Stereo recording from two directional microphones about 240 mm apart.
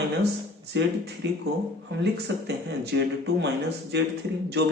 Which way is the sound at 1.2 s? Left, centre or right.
Right.